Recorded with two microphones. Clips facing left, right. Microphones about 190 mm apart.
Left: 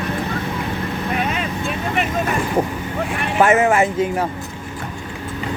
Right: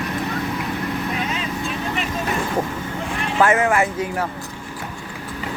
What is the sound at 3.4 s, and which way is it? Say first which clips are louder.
Speech: left 3 dB; 20° left (ahead or behind).